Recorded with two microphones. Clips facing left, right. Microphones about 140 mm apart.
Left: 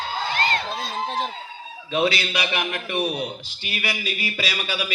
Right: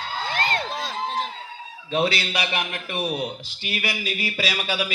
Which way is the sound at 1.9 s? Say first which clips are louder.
Left 1 dB; 40° right (ahead or behind).